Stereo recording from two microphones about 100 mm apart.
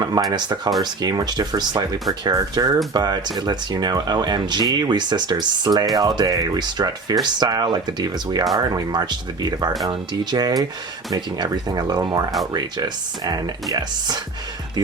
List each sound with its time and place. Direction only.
0.0 s speech: 40° right (ahead or behind)